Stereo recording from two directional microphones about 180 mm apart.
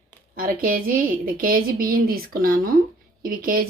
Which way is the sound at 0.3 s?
55° right (ahead or behind).